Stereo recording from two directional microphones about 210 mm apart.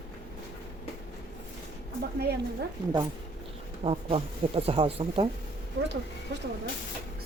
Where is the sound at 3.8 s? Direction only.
25° right (ahead or behind).